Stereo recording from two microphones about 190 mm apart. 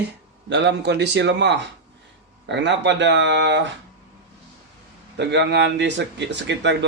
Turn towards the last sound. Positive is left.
turn(degrees=-65)  # may be behind; listen again after turning